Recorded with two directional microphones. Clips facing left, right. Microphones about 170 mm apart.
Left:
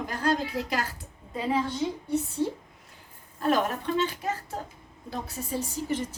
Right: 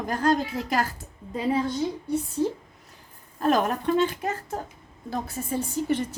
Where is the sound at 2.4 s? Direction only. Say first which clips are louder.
Right 4 dB; 40° right (ahead or behind).